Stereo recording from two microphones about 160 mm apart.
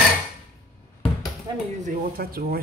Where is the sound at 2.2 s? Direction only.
70° right (ahead or behind).